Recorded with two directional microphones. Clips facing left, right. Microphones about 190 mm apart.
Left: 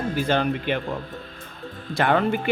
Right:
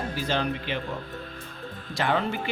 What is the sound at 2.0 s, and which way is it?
Speech, 55° left (ahead or behind).